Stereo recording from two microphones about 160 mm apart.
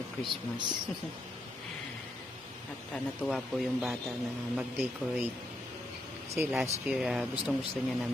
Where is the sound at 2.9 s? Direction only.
5° left (ahead or behind).